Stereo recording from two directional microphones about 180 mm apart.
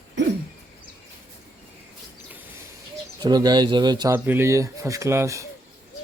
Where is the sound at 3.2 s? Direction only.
20° right (ahead or behind).